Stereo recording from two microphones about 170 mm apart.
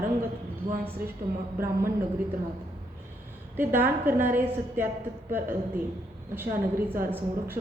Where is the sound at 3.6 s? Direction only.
10° right (ahead or behind).